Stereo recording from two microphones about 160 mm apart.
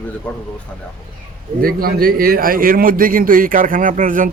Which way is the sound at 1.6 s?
65° right (ahead or behind).